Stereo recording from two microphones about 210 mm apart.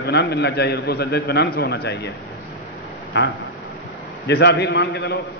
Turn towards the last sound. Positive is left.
turn(degrees=50)  # may be behind; listen again after turning